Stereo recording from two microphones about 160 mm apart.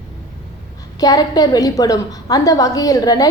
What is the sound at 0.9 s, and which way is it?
A woman's voice, 25° left (ahead or behind).